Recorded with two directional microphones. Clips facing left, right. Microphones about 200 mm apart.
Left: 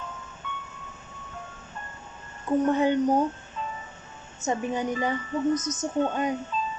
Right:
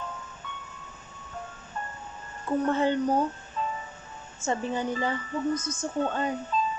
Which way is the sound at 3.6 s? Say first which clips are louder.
Right 4 dB; 40° right (ahead or behind).